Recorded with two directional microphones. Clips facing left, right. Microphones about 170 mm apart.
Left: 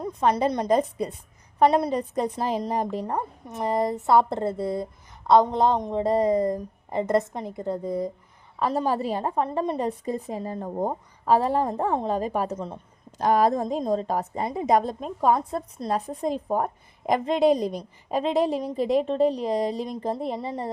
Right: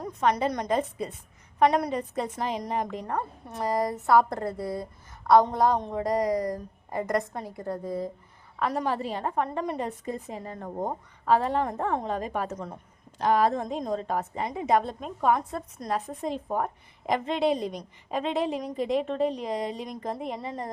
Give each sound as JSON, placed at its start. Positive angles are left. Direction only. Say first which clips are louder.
{"t": 0.0, "sound": "a woman's voice", "louder": "left 3 dB", "side_deg": 30}
{"t": 1.5, "sound": "a woman's voice", "louder": "left 3 dB", "side_deg": 30}
{"t": 3.2, "sound": "a woman's voice", "louder": "left 2 dB", "side_deg": 20}
{"t": 8.5, "sound": "a woman's voice", "louder": "left 3 dB", "side_deg": 30}
{"t": 12.5, "sound": "a woman's voice", "louder": "left 4 dB", "side_deg": 25}
{"t": 13.1, "sound": "a woman's voice", "louder": "left 2 dB", "side_deg": 45}